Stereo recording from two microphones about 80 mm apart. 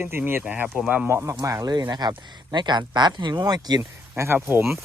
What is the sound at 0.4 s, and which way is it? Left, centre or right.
Speech, centre.